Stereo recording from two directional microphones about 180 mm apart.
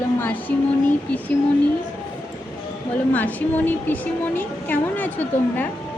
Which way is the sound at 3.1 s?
10° left (ahead or behind).